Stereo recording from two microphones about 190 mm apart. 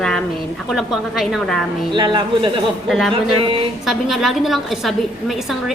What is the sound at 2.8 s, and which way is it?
A woman's voice, centre (ahead or behind).